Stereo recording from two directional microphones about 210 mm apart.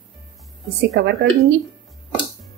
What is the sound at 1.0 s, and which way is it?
Speech, 50° right (ahead or behind).